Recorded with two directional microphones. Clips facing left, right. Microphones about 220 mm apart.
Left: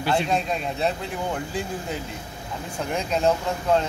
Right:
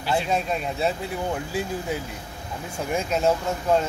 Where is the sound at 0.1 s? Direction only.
5° right (ahead or behind).